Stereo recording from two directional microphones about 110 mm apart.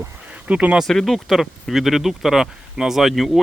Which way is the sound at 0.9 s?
5° left (ahead or behind).